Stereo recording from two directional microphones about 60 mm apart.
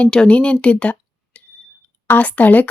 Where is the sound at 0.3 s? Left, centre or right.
Left.